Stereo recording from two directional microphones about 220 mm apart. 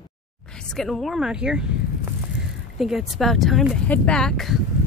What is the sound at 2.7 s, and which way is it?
Speech, centre (ahead or behind).